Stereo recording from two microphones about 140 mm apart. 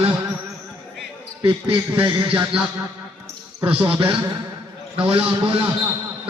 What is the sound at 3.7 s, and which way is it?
A man's voice, 40° right (ahead or behind).